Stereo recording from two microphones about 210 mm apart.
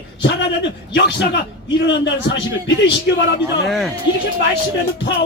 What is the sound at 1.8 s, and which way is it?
Speech, 55° left (ahead or behind).